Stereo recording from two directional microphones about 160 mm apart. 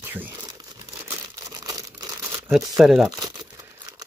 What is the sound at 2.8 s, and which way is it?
Speech, centre (ahead or behind).